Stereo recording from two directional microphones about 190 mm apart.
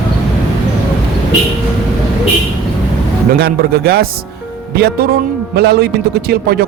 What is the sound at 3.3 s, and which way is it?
Speech, 55° right (ahead or behind).